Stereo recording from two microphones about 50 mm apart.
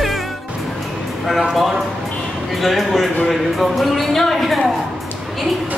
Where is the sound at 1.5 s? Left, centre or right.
Centre.